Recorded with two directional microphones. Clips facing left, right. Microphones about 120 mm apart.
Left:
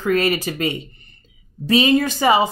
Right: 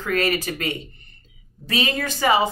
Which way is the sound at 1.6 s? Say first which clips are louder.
Left 9 dB; 20° left (ahead or behind).